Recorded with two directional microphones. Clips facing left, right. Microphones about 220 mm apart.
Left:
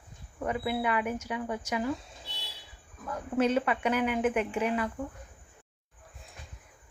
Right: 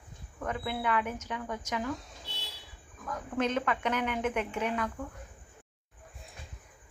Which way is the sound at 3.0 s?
10° left (ahead or behind).